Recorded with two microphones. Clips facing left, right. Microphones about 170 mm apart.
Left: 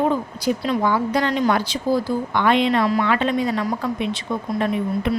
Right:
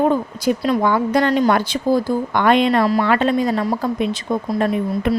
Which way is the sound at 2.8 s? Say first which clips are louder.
Right 3 dB; 35° right (ahead or behind).